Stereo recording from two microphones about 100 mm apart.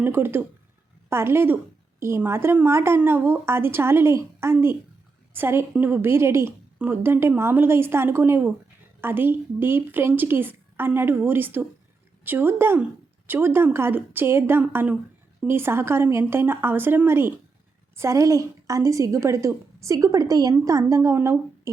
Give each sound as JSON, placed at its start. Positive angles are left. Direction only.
{"t": 0.0, "sound": "a woman's voice", "side_deg": -20}